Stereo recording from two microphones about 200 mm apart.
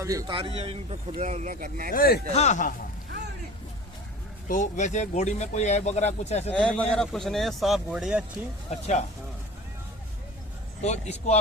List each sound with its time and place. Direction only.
0.0 s a man's voice: 15° right (ahead or behind); by 1.9 s 45° right (ahead or behind)
1.9 s speech: 50° left (ahead or behind)
2.3 s speech: 35° left (ahead or behind)
4.4 s speech: 40° left (ahead or behind)
6.5 s speech: 5° left (ahead or behind)
10.8 s speech: 35° left (ahead or behind)